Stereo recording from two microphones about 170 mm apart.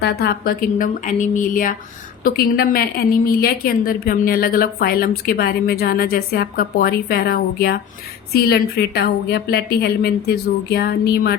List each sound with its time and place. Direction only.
0.0 s a woman's voice: 65° left (ahead or behind)